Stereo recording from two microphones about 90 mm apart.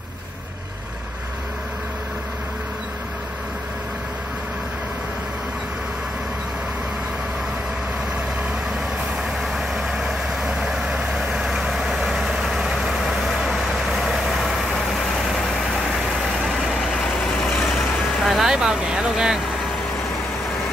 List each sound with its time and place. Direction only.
9.4 s vehicle: 5° right (ahead or behind)
17.5 s vehicle: centre (ahead or behind)